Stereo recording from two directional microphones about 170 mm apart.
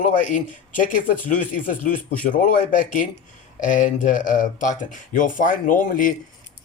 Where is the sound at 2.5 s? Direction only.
55° left (ahead or behind).